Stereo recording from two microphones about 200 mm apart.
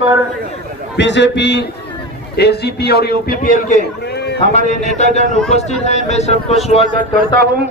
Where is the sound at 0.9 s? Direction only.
60° left (ahead or behind); by 3.7 s 45° left (ahead or behind).